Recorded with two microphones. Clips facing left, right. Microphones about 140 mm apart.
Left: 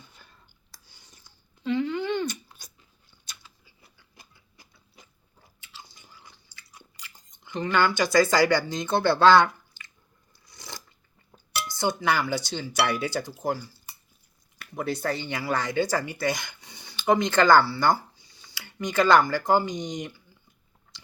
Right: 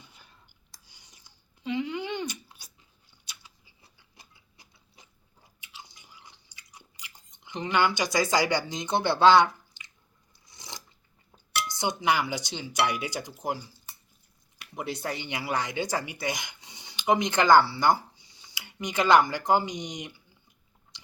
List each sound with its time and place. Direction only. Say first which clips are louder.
0.7 s a sound: left 3 dB; 15° right (ahead or behind)
7.3 s speech: left 2 dB; 20° right (ahead or behind)
10.4 s a sound: left 2 dB; 20° right (ahead or behind)
11.7 s speech: left 2 dB; 20° right (ahead or behind)
14.9 s speech: left 4 dB; 20° right (ahead or behind)
20.9 s chewing: left 2 dB; 20° right (ahead or behind)